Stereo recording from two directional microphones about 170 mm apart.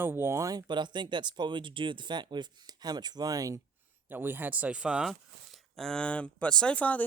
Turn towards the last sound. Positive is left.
turn(degrees=10)  # may be behind; listen again after turning